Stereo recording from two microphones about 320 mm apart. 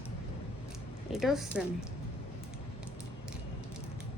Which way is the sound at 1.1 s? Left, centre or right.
Centre.